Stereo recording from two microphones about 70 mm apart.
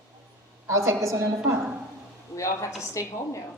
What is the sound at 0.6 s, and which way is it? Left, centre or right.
Speech, right.